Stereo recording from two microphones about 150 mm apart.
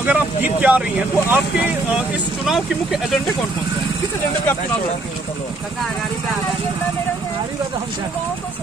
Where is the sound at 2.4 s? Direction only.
Centre (ahead or behind).